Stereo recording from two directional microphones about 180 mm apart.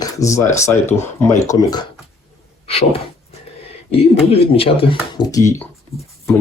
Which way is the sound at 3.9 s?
30° left (ahead or behind).